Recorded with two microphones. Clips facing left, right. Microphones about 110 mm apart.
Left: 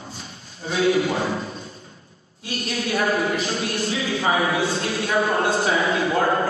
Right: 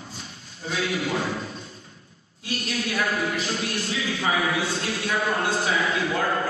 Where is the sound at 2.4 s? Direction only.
30° left (ahead or behind).